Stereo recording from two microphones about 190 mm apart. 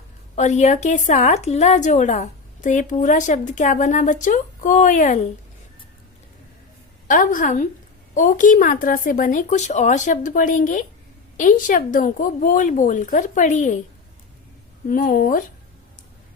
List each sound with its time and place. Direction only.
0.3 s a woman's voice: 40° left (ahead or behind)
7.1 s speech: 45° left (ahead or behind)
14.8 s speech: 45° left (ahead or behind)